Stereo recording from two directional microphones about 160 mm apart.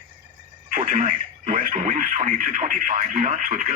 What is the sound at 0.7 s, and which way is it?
Speech, 60° right (ahead or behind).